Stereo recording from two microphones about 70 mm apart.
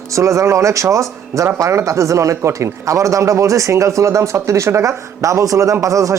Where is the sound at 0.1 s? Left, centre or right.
Right.